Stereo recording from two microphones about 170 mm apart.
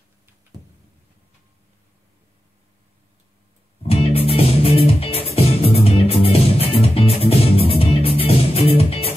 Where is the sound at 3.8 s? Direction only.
35° left (ahead or behind).